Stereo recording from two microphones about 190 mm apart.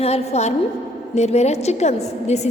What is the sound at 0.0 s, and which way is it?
A woman's voice, 35° left (ahead or behind).